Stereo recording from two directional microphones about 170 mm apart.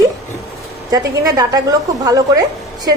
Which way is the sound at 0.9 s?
20° right (ahead or behind).